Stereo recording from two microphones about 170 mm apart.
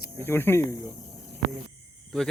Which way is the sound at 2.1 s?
5° left (ahead or behind).